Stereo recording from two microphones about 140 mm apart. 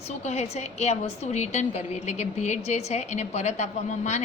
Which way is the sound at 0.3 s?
50° left (ahead or behind).